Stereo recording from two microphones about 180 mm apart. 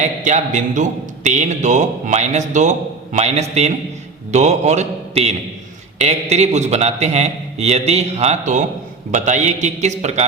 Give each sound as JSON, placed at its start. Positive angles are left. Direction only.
{"t": 0.0, "sound": "a man's voice", "side_deg": -40}